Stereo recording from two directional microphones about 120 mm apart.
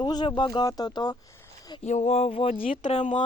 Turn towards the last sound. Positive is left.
turn(degrees=80)